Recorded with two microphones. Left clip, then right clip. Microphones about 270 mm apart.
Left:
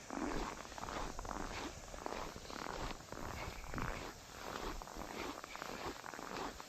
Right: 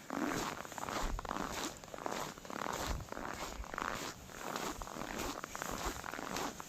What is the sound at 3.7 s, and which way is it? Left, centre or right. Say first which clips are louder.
Dog: right 5 dB; right.